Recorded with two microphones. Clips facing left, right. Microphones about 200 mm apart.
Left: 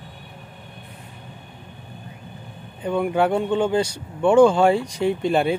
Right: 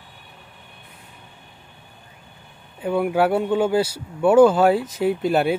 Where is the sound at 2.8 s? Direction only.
5° right (ahead or behind).